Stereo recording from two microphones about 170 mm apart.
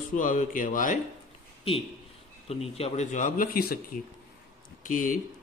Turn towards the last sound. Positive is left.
turn(degrees=50)  # may be behind; listen again after turning